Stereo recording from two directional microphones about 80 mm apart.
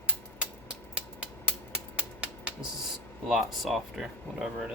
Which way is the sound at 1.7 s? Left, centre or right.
Centre.